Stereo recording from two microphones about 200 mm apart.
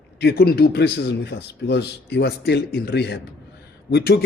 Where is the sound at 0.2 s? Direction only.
55° left (ahead or behind).